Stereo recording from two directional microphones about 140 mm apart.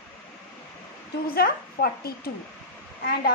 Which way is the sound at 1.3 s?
90° left.